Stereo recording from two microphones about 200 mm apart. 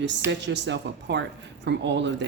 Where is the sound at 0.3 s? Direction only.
60° right (ahead or behind).